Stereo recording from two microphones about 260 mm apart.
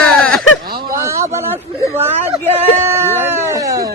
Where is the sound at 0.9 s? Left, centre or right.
Centre.